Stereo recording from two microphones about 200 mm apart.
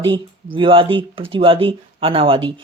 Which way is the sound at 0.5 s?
25° right (ahead or behind).